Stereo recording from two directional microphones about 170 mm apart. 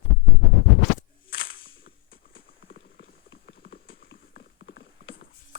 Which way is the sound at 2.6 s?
65° left (ahead or behind).